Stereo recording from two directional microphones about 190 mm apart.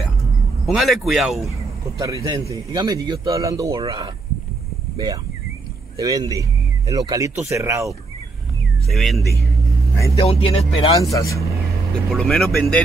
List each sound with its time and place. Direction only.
0.7 s a man's voice: centre (ahead or behind)
2.0 s a man's voice: 15° right (ahead or behind)
8.8 s a man's voice: centre (ahead or behind)
10.1 s speech: 30° left (ahead or behind)
11.0 s speech: 15° left (ahead or behind)
12.1 s a man's voice: 5° left (ahead or behind)